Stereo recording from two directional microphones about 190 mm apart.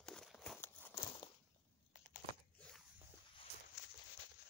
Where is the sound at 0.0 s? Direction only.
5° left (ahead or behind).